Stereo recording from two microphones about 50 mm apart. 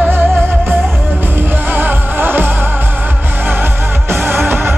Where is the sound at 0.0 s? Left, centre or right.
Right.